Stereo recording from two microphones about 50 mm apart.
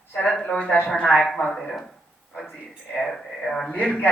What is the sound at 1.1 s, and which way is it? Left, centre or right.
Speech, centre.